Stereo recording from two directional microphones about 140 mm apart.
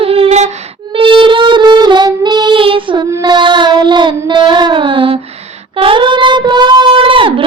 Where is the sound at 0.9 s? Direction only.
40° right (ahead or behind).